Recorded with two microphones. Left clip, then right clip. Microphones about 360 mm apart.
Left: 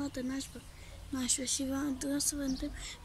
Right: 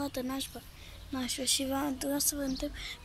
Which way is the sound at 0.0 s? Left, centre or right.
Centre.